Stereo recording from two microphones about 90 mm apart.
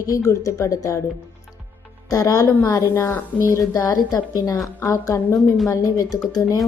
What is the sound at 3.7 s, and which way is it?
A woman's voice, 45° left (ahead or behind).